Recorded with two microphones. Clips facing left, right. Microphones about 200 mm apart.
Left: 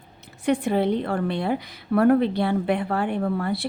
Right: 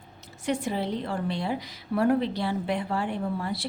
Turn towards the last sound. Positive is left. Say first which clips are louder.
# left 5 dB
turn(degrees=60)  # may be behind; listen again after turning